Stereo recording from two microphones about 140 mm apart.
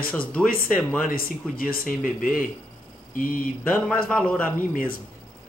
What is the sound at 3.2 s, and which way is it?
Mantra, 75° left (ahead or behind).